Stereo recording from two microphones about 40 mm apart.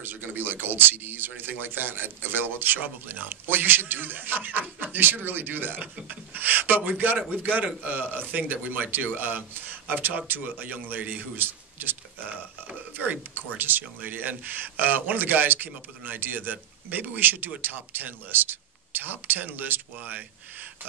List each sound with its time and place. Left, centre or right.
0.0 s a man's voice: right
11.3 s a man's voice: right